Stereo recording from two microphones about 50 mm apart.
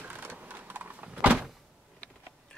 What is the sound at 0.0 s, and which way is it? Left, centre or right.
Power windows, right.